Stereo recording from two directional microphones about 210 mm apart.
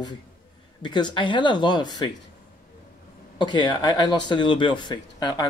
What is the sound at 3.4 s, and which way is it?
Speech, 20° left (ahead or behind).